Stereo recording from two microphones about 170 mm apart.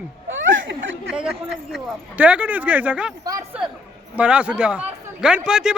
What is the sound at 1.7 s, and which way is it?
Speech, 5° right (ahead or behind).